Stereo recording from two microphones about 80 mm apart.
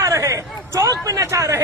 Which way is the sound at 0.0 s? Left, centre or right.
Right.